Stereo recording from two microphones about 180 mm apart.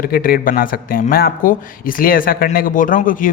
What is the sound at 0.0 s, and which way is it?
Speech, 55° left (ahead or behind).